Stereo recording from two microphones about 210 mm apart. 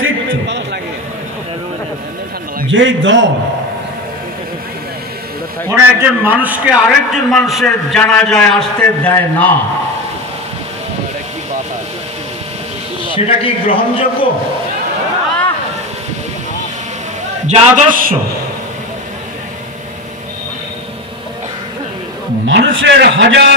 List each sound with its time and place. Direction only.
0.0 s a sound: 60° right (ahead or behind)
2.7 s a man's voice: 65° right (ahead or behind)
5.7 s a man's voice: 10° right (ahead or behind); by 9.5 s 5° left (ahead or behind)
13.1 s a man's voice: 25° left (ahead or behind)
17.5 s a man's voice: 40° right (ahead or behind)
22.5 s a man's voice: 60° right (ahead or behind)